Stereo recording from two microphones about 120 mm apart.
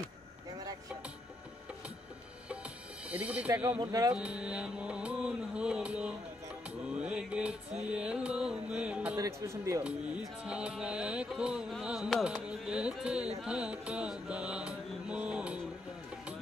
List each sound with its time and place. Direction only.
3.1 s music: 10° right (ahead or behind)
9.2 s a man's voice: 25° right (ahead or behind)
10.4 s music: 10° right (ahead or behind)